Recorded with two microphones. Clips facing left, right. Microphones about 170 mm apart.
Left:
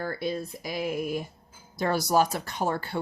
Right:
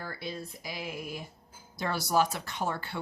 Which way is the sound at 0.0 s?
50° left (ahead or behind).